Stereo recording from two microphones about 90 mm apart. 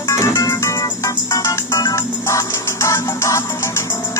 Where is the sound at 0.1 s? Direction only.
35° left (ahead or behind).